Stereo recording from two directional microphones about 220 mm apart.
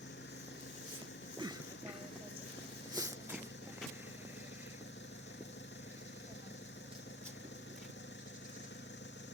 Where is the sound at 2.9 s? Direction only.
15° right (ahead or behind).